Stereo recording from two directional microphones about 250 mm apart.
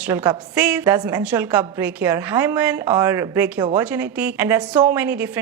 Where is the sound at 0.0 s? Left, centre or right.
Centre.